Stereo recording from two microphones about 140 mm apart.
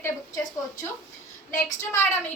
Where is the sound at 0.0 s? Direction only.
25° left (ahead or behind).